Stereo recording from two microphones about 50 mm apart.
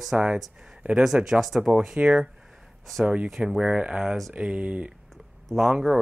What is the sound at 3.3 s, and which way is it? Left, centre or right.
Speech, centre.